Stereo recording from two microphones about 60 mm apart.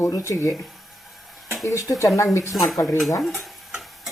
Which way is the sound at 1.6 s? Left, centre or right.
Left.